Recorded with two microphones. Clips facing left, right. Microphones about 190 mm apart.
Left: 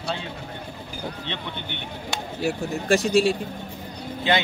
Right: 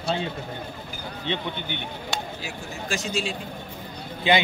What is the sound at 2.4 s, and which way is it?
Speech, 60° left (ahead or behind).